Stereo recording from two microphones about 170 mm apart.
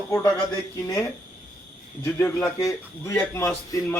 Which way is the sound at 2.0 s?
15° left (ahead or behind).